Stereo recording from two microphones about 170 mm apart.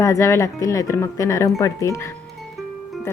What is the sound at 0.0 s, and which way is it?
Speech, 15° left (ahead or behind).